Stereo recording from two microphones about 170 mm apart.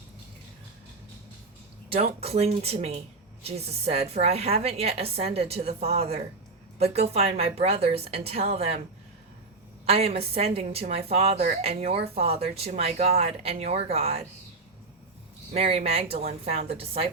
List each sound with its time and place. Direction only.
1.9 s speech: 35° right (ahead or behind)
9.8 s speech: 35° right (ahead or behind)
15.5 s speech: 35° right (ahead or behind)